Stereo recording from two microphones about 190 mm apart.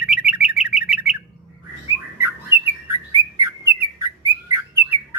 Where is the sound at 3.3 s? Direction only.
15° right (ahead or behind).